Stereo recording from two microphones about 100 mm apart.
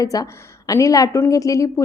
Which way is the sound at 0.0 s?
35° left (ahead or behind).